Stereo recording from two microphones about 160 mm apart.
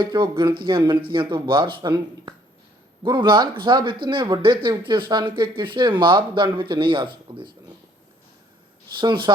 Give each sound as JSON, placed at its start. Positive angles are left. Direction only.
{"t": 0.0, "sound": "speech", "side_deg": -30}
{"t": 9.0, "sound": "speech", "side_deg": -30}